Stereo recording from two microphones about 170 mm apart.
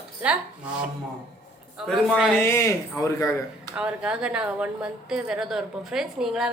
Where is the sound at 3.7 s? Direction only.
5° right (ahead or behind).